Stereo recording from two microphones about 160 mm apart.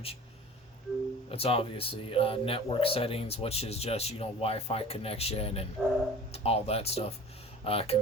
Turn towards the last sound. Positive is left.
turn(degrees=40)  # may be behind; listen again after turning